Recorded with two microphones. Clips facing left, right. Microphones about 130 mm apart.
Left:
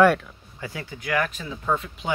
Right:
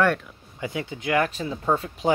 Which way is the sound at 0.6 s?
20° right (ahead or behind).